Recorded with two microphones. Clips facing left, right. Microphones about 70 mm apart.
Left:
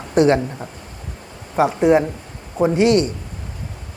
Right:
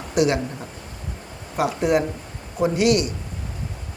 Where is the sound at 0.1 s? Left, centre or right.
Left.